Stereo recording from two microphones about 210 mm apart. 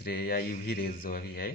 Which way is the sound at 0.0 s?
45° left (ahead or behind).